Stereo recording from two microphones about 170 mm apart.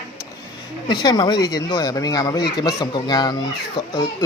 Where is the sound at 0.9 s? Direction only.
25° left (ahead or behind).